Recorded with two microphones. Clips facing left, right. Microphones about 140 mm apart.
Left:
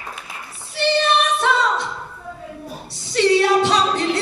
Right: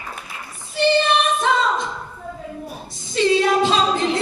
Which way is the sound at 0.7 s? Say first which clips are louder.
Right 1 dB; 70° left (ahead or behind).